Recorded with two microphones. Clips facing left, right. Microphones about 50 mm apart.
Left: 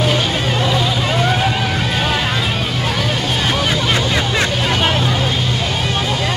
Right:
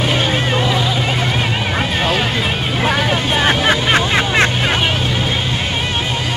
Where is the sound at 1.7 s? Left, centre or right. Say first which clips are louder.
Right 1 dB; right.